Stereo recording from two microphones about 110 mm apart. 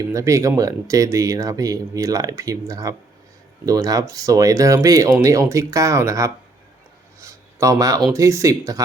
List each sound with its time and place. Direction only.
0.1 s speech: 30° right (ahead or behind)
7.2 s a sound: 30° right (ahead or behind)
8.1 s speech: 30° right (ahead or behind)